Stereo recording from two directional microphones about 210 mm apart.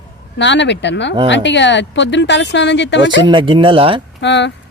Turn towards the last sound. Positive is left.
turn(degrees=55)  # may be behind; listen again after turning